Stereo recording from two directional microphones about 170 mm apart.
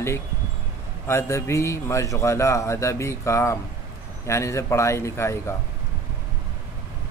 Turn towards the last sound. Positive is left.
turn(degrees=15)  # may be behind; listen again after turning